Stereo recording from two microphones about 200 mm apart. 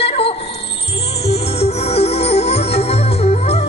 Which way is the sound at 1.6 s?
30° left (ahead or behind).